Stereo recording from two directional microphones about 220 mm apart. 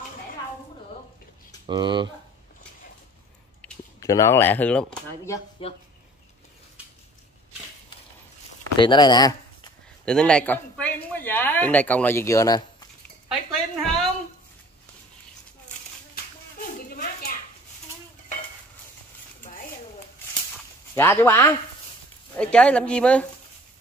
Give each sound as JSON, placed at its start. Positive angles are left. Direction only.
{"t": 1.7, "sound": "speech", "side_deg": -20}
{"t": 3.6, "sound": "speech", "side_deg": 15}
{"t": 5.6, "sound": "speech", "side_deg": 25}
{"t": 8.7, "sound": "speech", "side_deg": 20}
{"t": 10.0, "sound": "speech", "side_deg": 5}
{"t": 13.3, "sound": "a sound", "side_deg": 0}
{"t": 16.2, "sound": "clapping", "side_deg": 45}
{"t": 16.9, "sound": "a sound", "side_deg": 45}
{"t": 20.9, "sound": "speech", "side_deg": 10}